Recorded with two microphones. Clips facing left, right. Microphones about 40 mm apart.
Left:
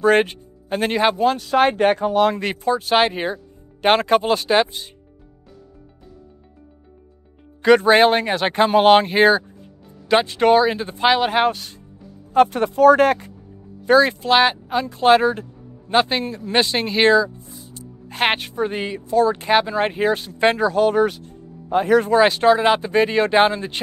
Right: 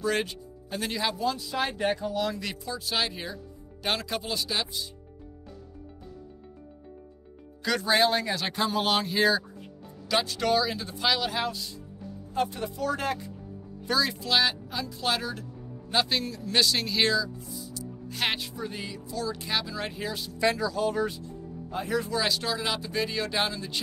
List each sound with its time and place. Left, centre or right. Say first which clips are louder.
0.0 s speech: left 12 dB; left
7.6 s speech: left 11 dB; left
13.8 s speech: left 13 dB; left
22.1 s speech: left 14 dB; left